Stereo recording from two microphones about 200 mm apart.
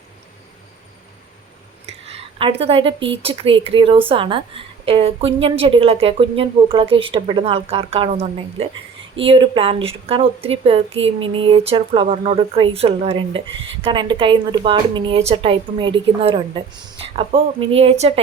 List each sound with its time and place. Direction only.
2.0 s a woman's voice: 30° right (ahead or behind)